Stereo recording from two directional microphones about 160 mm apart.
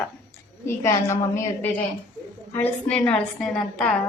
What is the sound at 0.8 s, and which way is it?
A woman's voice, 20° left (ahead or behind).